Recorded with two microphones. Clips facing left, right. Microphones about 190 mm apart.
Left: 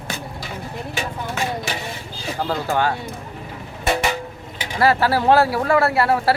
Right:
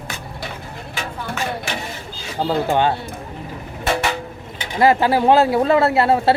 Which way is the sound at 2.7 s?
20° right (ahead or behind).